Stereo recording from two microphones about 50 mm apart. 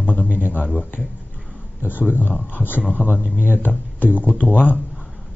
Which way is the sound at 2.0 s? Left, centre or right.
Left.